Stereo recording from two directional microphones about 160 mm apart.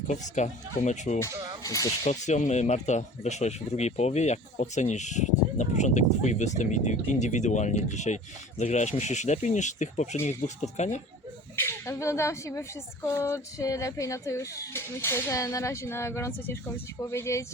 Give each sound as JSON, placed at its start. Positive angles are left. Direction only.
{"t": 0.1, "sound": "speech", "side_deg": 50}
{"t": 1.3, "sound": "speech", "side_deg": -25}
{"t": 1.6, "sound": "speech", "side_deg": 20}
{"t": 2.0, "sound": "speech", "side_deg": 50}
{"t": 11.5, "sound": "speech", "side_deg": 15}